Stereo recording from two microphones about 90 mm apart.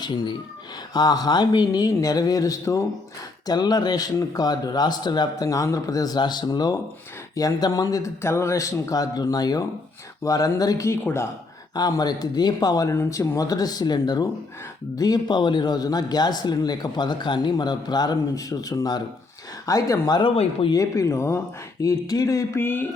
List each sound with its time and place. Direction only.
0.0 s a man's voice: 55° left (ahead or behind)
12.9 s speech: 35° left (ahead or behind); by 20.3 s 50° left (ahead or behind)
20.3 s speech: 90° left
20.7 s a man's voice: 35° left (ahead or behind)
22.5 s a sound: 20° left (ahead or behind)